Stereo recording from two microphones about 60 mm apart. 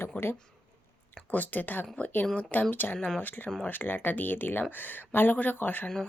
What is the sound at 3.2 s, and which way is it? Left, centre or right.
Speech, left.